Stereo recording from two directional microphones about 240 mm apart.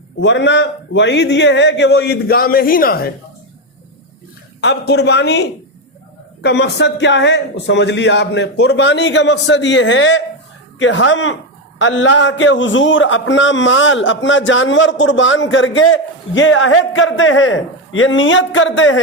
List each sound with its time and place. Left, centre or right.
0.2 s a man's voice: left
4.6 s a man's voice: left